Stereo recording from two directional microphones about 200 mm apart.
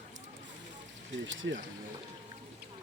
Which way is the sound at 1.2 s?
65° right (ahead or behind).